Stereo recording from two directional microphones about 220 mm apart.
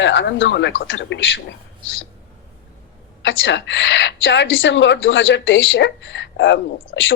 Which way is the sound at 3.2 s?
55° left (ahead or behind).